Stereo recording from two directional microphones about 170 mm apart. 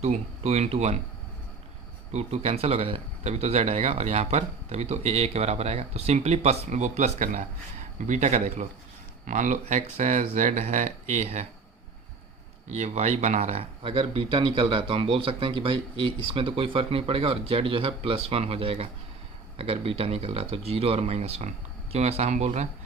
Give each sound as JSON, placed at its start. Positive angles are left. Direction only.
{"t": 0.0, "sound": "speech", "side_deg": -40}
{"t": 2.1, "sound": "speech", "side_deg": -35}
{"t": 12.7, "sound": "speech", "side_deg": -40}